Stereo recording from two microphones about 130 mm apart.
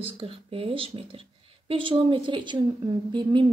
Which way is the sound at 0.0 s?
45° right (ahead or behind).